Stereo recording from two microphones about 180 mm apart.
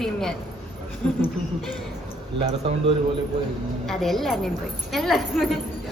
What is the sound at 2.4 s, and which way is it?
Speech, 25° right (ahead or behind).